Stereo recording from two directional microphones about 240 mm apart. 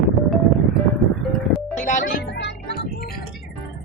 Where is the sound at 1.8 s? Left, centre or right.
Left.